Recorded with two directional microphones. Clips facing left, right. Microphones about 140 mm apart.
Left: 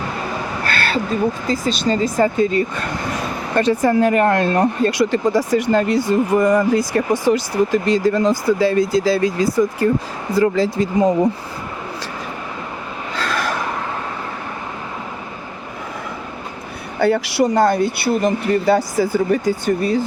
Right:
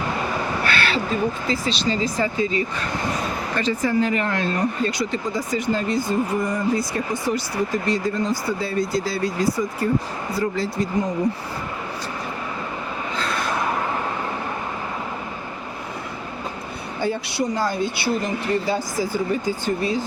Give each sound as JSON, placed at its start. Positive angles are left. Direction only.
{"t": 0.6, "sound": "a sound", "side_deg": 45}
{"t": 1.5, "sound": "speech", "side_deg": 45}
{"t": 10.4, "sound": "speech", "side_deg": 90}
{"t": 13.1, "sound": "gasp", "side_deg": 80}
{"t": 17.0, "sound": "speech", "side_deg": 75}